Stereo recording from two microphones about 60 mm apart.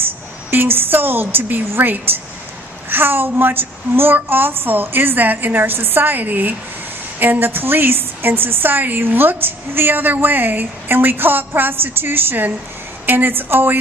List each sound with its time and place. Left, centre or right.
0.5 s a woman's voice: right